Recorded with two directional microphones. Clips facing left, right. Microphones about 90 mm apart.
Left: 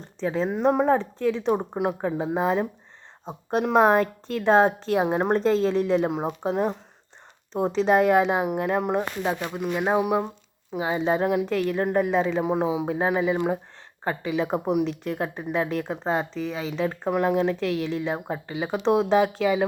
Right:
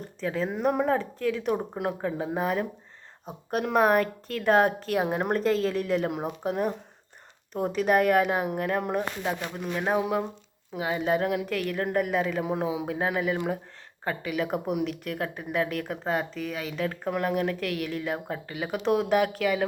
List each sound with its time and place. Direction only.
0.2 s a woman's voice: 25° left (ahead or behind)